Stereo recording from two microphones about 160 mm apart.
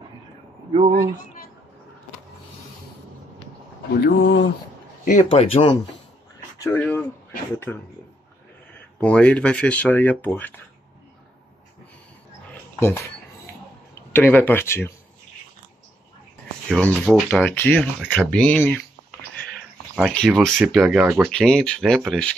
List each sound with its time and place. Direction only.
0.7 s speech: 40° right (ahead or behind)
3.9 s speech: 90° left
5.0 s speech: 45° left (ahead or behind)
6.7 s speech: 10° left (ahead or behind)
9.0 s speech: 5° left (ahead or behind)
14.1 s speech: 15° left (ahead or behind)
16.7 s speech: 5° left (ahead or behind)
19.4 s a sound: centre (ahead or behind)
20.6 s speech: 5° right (ahead or behind)
21.3 s speech: 5° left (ahead or behind)